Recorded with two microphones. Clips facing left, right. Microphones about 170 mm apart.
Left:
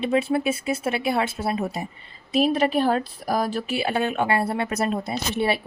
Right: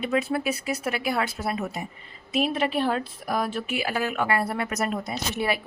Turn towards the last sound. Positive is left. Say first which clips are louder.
# left 3 dB
turn(degrees=30)  # may be behind; listen again after turning